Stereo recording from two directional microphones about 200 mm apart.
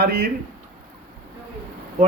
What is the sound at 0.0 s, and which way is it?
Speech, 50° right (ahead or behind).